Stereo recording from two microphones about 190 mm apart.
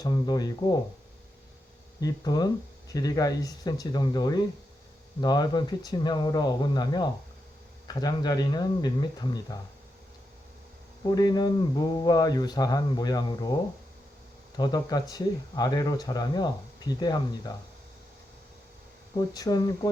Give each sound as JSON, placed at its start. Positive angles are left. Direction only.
{"t": 0.0, "sound": "speech", "side_deg": 20}
{"t": 2.0, "sound": "speech", "side_deg": 20}
{"t": 11.0, "sound": "speech", "side_deg": 20}
{"t": 19.1, "sound": "speech", "side_deg": 20}